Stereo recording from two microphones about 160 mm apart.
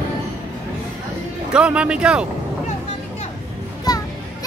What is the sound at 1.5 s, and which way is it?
Speech, 5° right (ahead or behind).